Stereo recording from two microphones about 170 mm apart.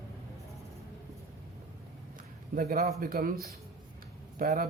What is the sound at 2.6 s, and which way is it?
Speech, 55° right (ahead or behind).